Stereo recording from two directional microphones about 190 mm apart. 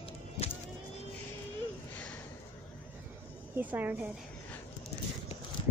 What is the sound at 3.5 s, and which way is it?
Insect, 10° right (ahead or behind).